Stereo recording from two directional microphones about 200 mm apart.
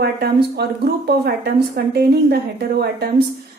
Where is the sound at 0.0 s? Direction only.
55° right (ahead or behind).